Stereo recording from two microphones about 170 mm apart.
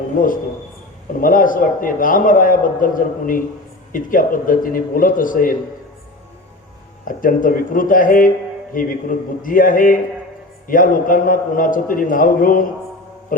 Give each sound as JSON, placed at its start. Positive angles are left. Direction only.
{"t": 1.2, "sound": "a man's voice", "side_deg": 55}
{"t": 7.0, "sound": "a man's voice", "side_deg": 55}